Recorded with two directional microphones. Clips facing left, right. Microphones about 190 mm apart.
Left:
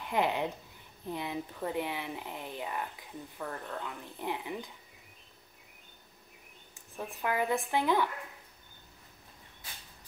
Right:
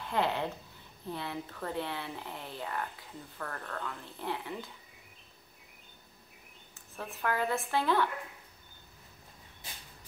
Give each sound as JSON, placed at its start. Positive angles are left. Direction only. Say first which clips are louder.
{"t": 0.0, "sound": "speech", "louder": "left 1 dB", "side_deg": 15}
{"t": 6.7, "sound": "speech", "louder": "left 2 dB", "side_deg": 15}